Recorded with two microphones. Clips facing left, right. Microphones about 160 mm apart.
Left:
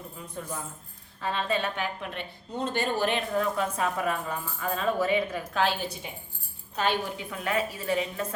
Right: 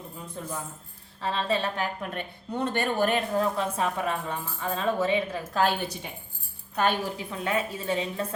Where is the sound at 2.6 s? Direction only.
55° right (ahead or behind).